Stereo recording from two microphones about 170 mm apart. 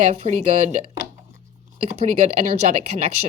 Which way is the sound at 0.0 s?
40° right (ahead or behind).